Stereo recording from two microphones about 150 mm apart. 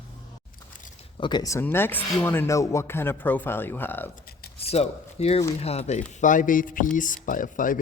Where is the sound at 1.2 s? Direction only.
25° left (ahead or behind).